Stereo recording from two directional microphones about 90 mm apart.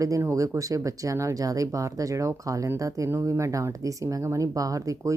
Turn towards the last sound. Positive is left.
turn(degrees=-40)  # may be behind; listen again after turning